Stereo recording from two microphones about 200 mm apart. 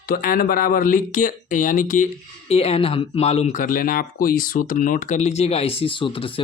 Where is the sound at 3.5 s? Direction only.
45° left (ahead or behind); by 6.4 s 25° left (ahead or behind).